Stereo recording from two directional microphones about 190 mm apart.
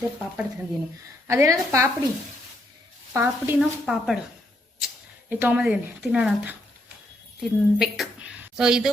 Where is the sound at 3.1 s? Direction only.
10° right (ahead or behind).